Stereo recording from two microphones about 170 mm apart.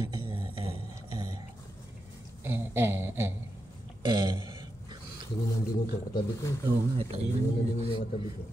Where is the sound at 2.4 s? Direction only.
15° right (ahead or behind).